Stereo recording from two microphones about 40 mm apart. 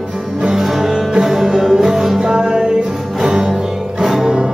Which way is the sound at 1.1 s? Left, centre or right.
Centre.